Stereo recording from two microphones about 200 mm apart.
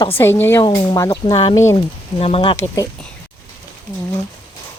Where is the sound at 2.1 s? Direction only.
30° left (ahead or behind).